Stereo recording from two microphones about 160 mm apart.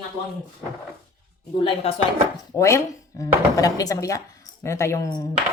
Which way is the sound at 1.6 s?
35° left (ahead or behind).